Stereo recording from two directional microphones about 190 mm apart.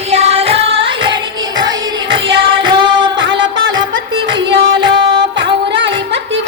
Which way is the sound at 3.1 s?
75° right (ahead or behind).